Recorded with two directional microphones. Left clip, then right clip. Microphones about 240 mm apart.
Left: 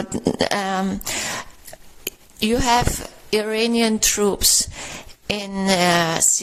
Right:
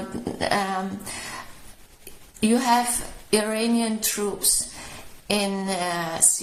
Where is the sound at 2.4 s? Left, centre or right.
Left.